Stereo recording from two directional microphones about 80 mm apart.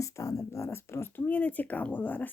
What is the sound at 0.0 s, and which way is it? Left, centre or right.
Speech, left.